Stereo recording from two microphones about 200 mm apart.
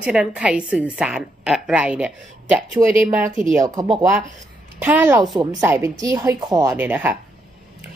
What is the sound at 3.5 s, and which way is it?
Speech, 20° right (ahead or behind).